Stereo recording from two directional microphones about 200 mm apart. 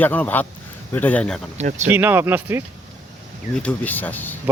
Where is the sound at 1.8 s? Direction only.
10° right (ahead or behind).